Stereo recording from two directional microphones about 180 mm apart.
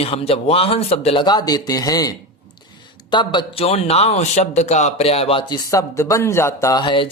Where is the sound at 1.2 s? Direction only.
20° left (ahead or behind).